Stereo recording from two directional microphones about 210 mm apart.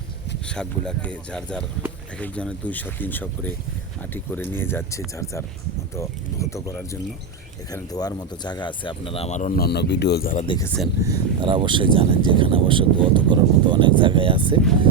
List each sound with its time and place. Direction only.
0.4 s speech: 5° left (ahead or behind); by 9.5 s 30° left (ahead or behind)
9.6 s speech: 50° left (ahead or behind)
10.4 s speech: 20° left (ahead or behind)
11.0 s speech: 20° right (ahead or behind)